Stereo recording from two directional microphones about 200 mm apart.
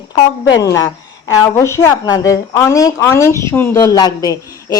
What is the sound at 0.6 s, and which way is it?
A woman's voice, 15° left (ahead or behind).